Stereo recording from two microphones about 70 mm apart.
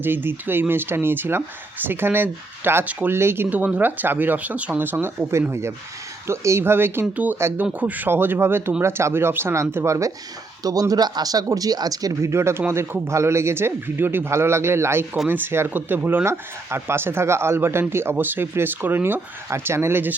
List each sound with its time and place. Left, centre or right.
0.0 s speech: right
10.6 s speech: right
12.3 s speech: right